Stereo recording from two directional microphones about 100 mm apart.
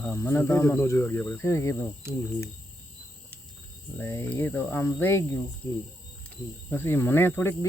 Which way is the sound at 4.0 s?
20° left (ahead or behind).